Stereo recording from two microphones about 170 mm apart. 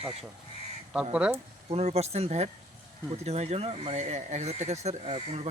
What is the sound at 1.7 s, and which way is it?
Speech, 40° right (ahead or behind).